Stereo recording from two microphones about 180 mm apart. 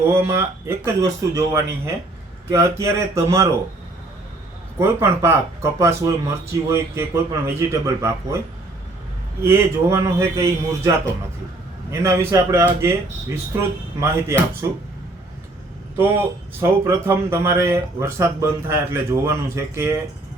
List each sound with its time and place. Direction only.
0.0 s a man's voice: 15° right (ahead or behind)
4.8 s a man's voice: 15° right (ahead or behind)
9.4 s a man's voice: 15° right (ahead or behind)
16.0 s a man's voice: 15° right (ahead or behind)